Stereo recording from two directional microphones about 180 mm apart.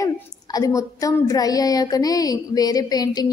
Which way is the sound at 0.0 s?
20° left (ahead or behind).